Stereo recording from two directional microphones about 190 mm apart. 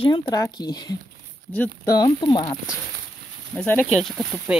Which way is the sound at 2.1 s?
25° left (ahead or behind).